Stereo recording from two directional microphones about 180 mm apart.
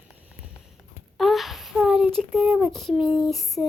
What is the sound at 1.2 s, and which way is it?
Speech, centre (ahead or behind).